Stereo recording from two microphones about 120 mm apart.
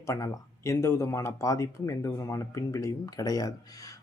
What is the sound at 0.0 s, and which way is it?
Speech, 25° left (ahead or behind).